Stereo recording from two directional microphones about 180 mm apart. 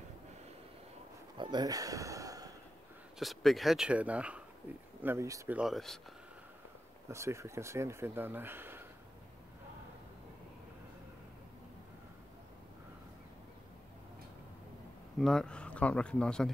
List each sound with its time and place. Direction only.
1.4 s speech: 25° right (ahead or behind)
3.2 s speech: centre (ahead or behind)
5.6 s speech: centre (ahead or behind)
7.1 s speech: 15° right (ahead or behind)
15.1 s speech: centre (ahead or behind)